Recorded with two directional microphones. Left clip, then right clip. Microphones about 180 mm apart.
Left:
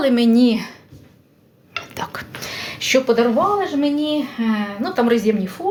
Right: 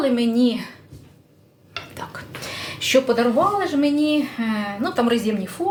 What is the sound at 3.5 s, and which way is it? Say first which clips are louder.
A woman's voice: even; 10° left (ahead or behind).